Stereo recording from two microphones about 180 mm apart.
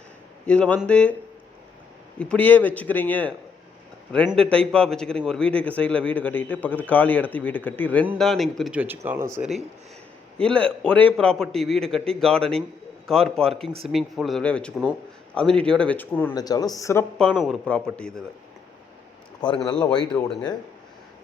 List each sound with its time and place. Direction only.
0.4 s a man's voice: 5° left (ahead or behind)
2.1 s a man's voice: 5° left (ahead or behind); by 9.5 s 15° right (ahead or behind)
10.3 s a man's voice: 5° left (ahead or behind)
16.3 s a man's voice: 20° left (ahead or behind)
17.2 s a man's voice: centre (ahead or behind)
19.4 s a man's voice: 25° left (ahead or behind)